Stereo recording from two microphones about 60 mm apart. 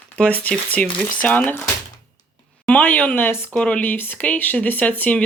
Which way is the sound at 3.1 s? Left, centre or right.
Left.